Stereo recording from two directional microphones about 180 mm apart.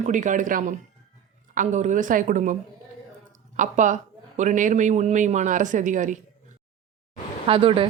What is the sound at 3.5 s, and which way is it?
Speech, 45° right (ahead or behind).